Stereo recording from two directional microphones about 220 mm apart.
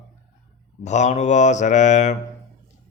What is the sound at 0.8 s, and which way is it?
Speech, 30° left (ahead or behind).